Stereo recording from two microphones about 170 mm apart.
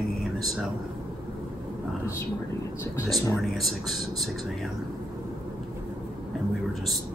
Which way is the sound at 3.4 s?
Centre (ahead or behind).